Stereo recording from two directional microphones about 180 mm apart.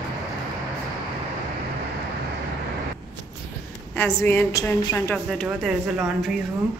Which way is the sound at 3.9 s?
10° left (ahead or behind).